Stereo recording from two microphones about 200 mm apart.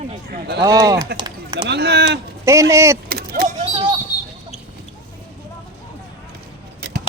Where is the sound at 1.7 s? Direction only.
55° right (ahead or behind).